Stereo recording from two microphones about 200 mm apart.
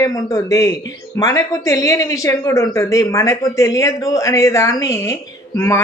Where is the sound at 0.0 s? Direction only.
15° left (ahead or behind).